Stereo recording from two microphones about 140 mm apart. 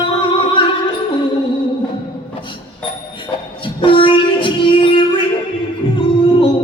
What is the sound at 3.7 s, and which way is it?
Music, 40° left (ahead or behind).